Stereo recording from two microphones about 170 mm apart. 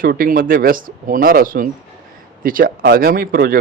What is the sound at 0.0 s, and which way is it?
A man's voice, 55° right (ahead or behind).